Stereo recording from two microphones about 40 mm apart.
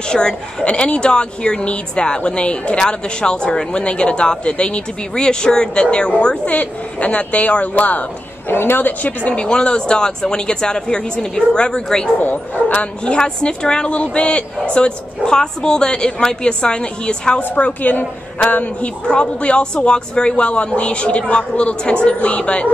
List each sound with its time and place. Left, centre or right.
0.1 s a woman's voice: centre; by 8.0 s left
8.5 s speech: left
8.8 s speech: left
9.3 s a woman's voice: left
12.2 s speech: left
12.7 s a woman's voice: left
17.4 s speech: left
19.0 s a woman's voice: left